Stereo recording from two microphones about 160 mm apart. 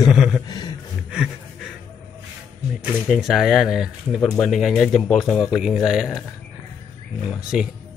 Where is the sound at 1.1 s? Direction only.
5° right (ahead or behind).